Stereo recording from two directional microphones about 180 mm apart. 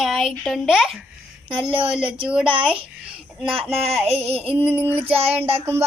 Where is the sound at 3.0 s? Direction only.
5° right (ahead or behind).